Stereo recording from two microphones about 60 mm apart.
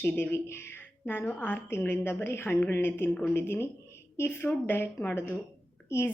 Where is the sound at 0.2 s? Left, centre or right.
Left.